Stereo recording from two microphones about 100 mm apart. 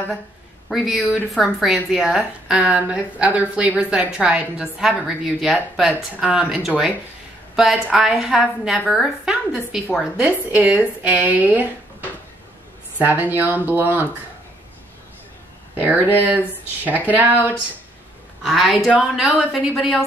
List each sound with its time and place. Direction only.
0.7 s a woman's voice: centre (ahead or behind)
7.5 s a woman's voice: 5° right (ahead or behind); by 11.7 s 20° right (ahead or behind)
13.0 s speech: 20° right (ahead or behind)
15.7 s a woman's voice: 20° right (ahead or behind)
18.4 s speech: centre (ahead or behind)